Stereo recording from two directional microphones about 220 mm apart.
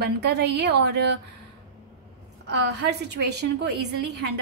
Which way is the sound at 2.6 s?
50° right (ahead or behind).